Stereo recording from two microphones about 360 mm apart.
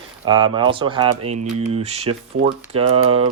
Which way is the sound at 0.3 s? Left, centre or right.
Centre.